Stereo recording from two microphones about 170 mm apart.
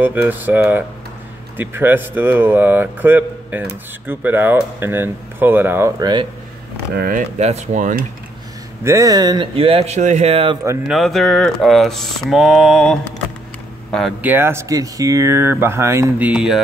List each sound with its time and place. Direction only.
0.0 s speech: 10° right (ahead or behind)
7.0 s speech: 50° right (ahead or behind)
8.8 s speech: 20° right (ahead or behind); by 10.6 s 35° right (ahead or behind)
10.9 s speech: centre (ahead or behind)
14.2 s speech: 10° right (ahead or behind)